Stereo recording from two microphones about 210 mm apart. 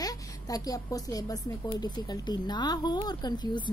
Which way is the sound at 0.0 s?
15° left (ahead or behind).